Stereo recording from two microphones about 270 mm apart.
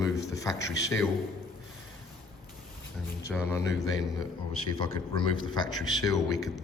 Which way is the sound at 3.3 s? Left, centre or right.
Centre.